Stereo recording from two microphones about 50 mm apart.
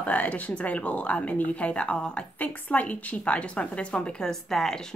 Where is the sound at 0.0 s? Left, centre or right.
Left.